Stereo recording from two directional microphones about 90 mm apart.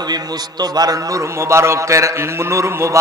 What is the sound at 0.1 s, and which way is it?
A man's voice, 45° right (ahead or behind).